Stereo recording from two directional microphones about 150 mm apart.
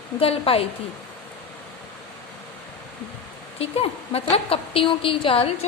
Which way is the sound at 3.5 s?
40° left (ahead or behind).